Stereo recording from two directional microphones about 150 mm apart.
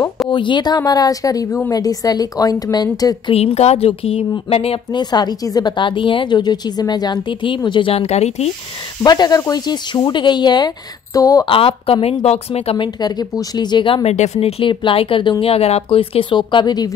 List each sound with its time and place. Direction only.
0.3 s speech: 30° left (ahead or behind)
3.3 s a woman's voice: 45° left (ahead or behind)
9.0 s speech: 25° left (ahead or behind)
11.4 s a woman's voice: 35° left (ahead or behind)
14.1 s a woman's voice: 50° left (ahead or behind); by 16.9 s 25° left (ahead or behind)